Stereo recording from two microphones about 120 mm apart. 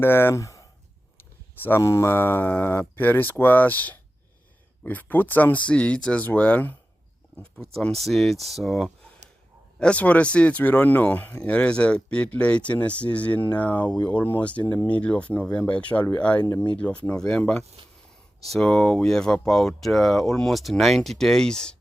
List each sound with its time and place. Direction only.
0.0 s speech: 20° left (ahead or behind)
1.6 s speech: 20° left (ahead or behind); by 21.8 s 5° left (ahead or behind)